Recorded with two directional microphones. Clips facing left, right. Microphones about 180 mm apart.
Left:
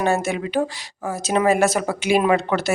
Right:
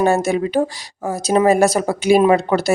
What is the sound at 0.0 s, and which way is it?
A woman's voice, 35° right (ahead or behind).